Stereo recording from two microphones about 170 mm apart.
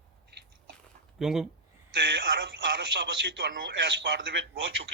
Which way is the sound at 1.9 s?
90° right.